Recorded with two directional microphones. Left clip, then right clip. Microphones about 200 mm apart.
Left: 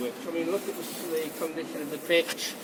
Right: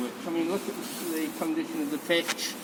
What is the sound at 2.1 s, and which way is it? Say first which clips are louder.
Speech: left 2 dB; 10° right (ahead or behind).